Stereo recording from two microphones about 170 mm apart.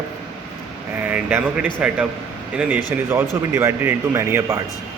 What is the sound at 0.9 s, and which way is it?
Speech, 10° right (ahead or behind).